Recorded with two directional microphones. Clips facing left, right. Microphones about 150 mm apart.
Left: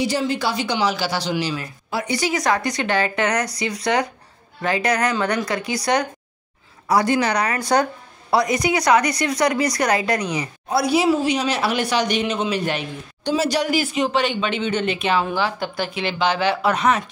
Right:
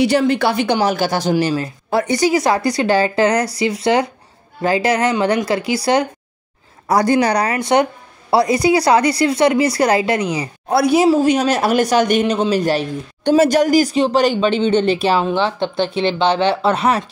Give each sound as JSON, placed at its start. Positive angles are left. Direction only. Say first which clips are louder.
{"t": 0.0, "sound": "speech", "louder": "right 7 dB", "side_deg": -65}
{"t": 2.3, "sound": "speech", "louder": "right 5 dB", "side_deg": -30}
{"t": 6.9, "sound": "speech", "louder": "right 4 dB", "side_deg": -40}
{"t": 7.5, "sound": "speech", "louder": "right 4 dB", "side_deg": -20}
{"t": 10.7, "sound": "a woman's voice", "louder": "right 5 dB", "side_deg": -55}
{"t": 11.1, "sound": "speech", "louder": "right 6 dB", "side_deg": -45}
{"t": 12.4, "sound": "speech", "louder": "right 6 dB", "side_deg": -35}
{"t": 13.2, "sound": "speech", "louder": "right 8 dB", "side_deg": -50}